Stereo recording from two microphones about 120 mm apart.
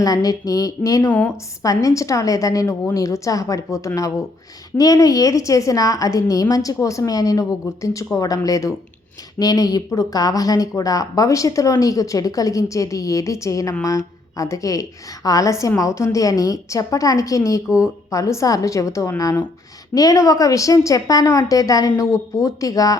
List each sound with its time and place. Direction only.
0.0 s a woman's voice: 30° left (ahead or behind)